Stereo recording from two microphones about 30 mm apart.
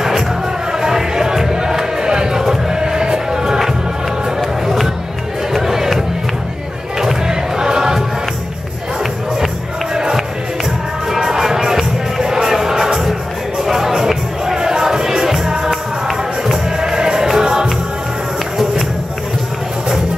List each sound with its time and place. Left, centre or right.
0.7 s music: centre
1.5 s crowd: centre
2.4 s choir: centre
2.8 s music: right
5.5 s music: centre
7.0 s crowd: centre
11.1 s music: centre
16.8 s music: right